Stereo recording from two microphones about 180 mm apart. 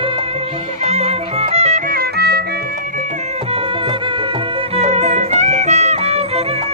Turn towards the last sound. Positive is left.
turn(degrees=-35)  # may be behind; listen again after turning